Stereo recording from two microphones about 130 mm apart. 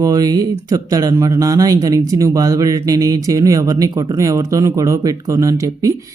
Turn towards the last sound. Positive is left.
turn(degrees=-25)  # may be behind; listen again after turning